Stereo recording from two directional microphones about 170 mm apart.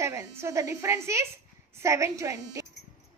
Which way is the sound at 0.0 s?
15° right (ahead or behind).